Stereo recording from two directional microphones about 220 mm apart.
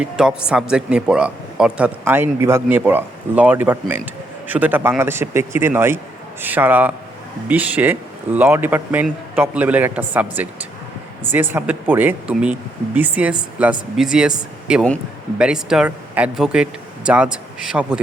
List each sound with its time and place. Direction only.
0.0 s speech: 5° right (ahead or behind)